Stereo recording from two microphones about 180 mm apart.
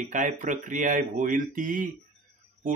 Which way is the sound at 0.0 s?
45° right (ahead or behind).